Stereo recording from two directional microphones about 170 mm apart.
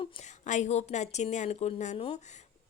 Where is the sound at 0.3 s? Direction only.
45° left (ahead or behind).